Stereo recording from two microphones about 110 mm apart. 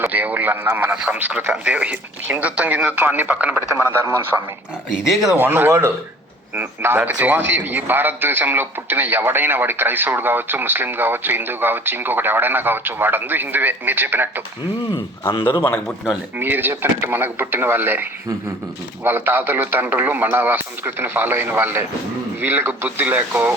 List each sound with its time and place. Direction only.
0.0 s a man's voice: 15° right (ahead or behind)
5.0 s speech: 5° right (ahead or behind)
5.4 s a man's voice: 20° right (ahead or behind)
16.4 s a man's voice: 20° right (ahead or behind)